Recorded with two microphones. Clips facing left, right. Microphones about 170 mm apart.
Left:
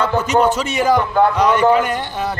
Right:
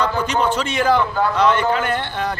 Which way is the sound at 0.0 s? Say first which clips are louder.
Left 2 dB; 10° left (ahead or behind).